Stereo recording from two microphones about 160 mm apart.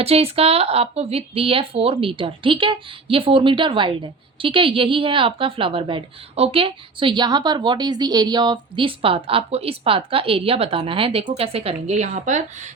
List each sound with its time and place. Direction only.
0.0 s speech: 40° right (ahead or behind)